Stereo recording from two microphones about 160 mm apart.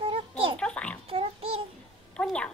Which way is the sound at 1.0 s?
35° right (ahead or behind).